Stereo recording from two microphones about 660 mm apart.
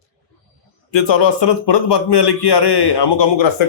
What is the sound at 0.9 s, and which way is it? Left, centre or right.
A man's voice, left.